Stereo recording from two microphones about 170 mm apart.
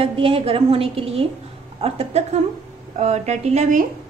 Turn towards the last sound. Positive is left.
turn(degrees=-45)  # may be behind; listen again after turning